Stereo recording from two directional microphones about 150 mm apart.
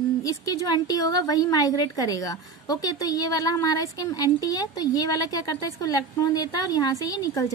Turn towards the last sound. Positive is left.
turn(degrees=20)  # may be behind; listen again after turning